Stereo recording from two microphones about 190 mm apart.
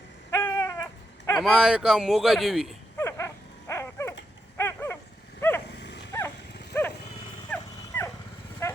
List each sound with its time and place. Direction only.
0.3 s baby cry: 15° left (ahead or behind)
1.4 s a man's voice: centre (ahead or behind)
3.0 s dog: 15° left (ahead or behind)
5.4 s vehicle: 10° left (ahead or behind)
5.6 s dog: 60° left (ahead or behind)
6.1 s vehicle: 15° left (ahead or behind)
7.5 s dog: 10° left (ahead or behind)
8.6 s livestock: 15° left (ahead or behind)